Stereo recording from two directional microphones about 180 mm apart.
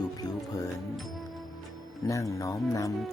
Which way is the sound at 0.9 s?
Centre (ahead or behind).